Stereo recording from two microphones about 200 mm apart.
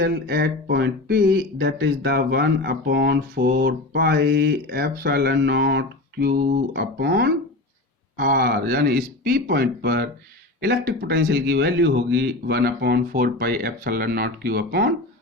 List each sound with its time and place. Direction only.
0.0 s speech: 50° right (ahead or behind)